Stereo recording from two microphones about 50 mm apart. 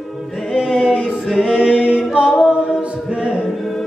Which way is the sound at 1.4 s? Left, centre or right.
Centre.